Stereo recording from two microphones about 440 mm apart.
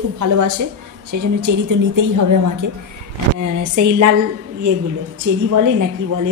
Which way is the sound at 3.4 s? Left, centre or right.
Right.